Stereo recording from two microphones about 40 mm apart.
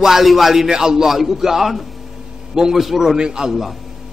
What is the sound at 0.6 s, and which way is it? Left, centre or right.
A man's voice, centre.